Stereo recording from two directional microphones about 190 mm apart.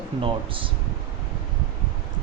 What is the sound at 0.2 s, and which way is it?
Speech, 25° right (ahead or behind).